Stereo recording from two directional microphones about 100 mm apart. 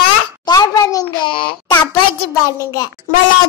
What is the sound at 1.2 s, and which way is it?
Speech, 60° left (ahead or behind).